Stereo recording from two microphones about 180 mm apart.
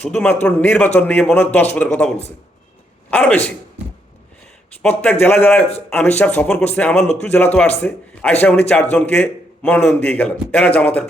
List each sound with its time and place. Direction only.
0.0 s speech: 5° left (ahead or behind)
4.8 s speech: 5° left (ahead or behind)